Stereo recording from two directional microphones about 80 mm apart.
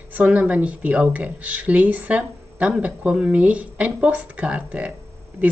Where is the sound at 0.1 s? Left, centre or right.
Centre.